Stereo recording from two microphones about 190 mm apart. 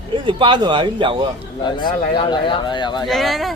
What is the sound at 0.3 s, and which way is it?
Speech, 25° right (ahead or behind).